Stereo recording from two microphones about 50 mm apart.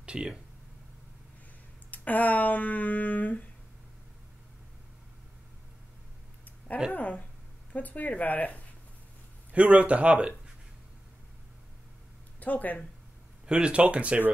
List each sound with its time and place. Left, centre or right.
0.0 s speech: centre
1.9 s speech: left
6.9 s speech: left
9.5 s speech: right
12.4 s speech: left
13.5 s speech: right